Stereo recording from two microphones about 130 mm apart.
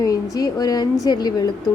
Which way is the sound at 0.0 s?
30° left (ahead or behind).